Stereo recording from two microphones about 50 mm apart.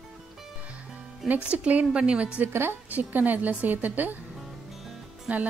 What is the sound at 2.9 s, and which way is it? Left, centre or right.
Speech, right.